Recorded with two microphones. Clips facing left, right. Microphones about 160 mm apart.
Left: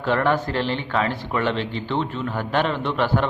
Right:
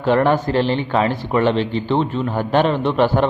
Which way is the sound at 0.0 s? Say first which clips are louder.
Right 5 dB; 20° right (ahead or behind).